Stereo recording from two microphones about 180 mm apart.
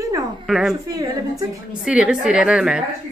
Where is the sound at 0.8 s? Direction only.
20° right (ahead or behind).